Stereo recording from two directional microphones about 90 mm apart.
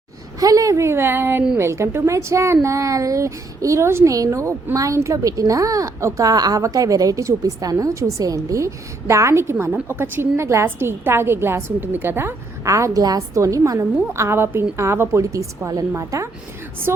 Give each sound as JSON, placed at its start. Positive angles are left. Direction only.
{"t": 0.3, "sound": "a woman's voice", "side_deg": -40}